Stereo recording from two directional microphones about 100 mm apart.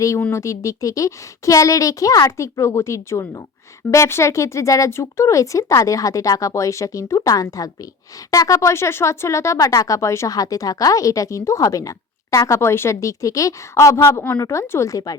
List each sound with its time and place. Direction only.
0.3 s speech: 30° left (ahead or behind)